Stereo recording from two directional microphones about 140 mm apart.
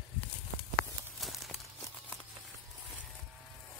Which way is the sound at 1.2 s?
Centre (ahead or behind).